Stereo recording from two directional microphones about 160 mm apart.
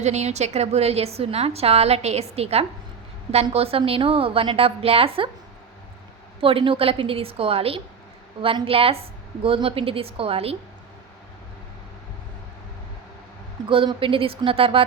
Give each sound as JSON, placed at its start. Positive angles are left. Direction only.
{"t": 0.0, "sound": "a woman's voice", "side_deg": -45}
{"t": 6.4, "sound": "a woman's voice", "side_deg": -35}
{"t": 13.7, "sound": "a woman's voice", "side_deg": -30}